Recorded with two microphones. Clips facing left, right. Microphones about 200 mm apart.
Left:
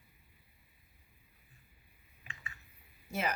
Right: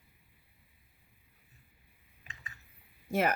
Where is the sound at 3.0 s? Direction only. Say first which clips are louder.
Right 7 dB; 55° right (ahead or behind).